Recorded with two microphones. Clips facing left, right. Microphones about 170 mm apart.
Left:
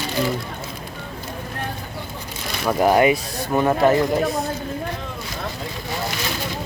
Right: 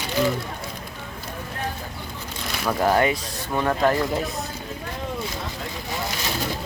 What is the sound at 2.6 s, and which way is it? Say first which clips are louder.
Speech: left 4 dB; 15° left (ahead or behind).